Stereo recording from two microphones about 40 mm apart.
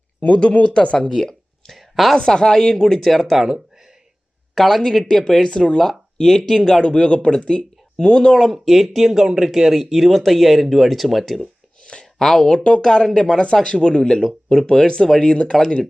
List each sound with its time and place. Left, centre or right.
0.6 s speech: left
1.1 s a sound: centre
1.7 s a sound: centre
2.1 s speech: centre
3.0 s speech: centre
4.5 s speech: centre
8.6 s speech: centre
9.2 s speech: centre
9.5 s speech: centre
12.2 s speech: centre
12.5 s speech: left